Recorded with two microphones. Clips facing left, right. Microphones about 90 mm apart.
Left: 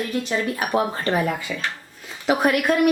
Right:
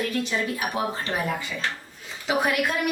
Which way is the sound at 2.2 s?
55° left (ahead or behind).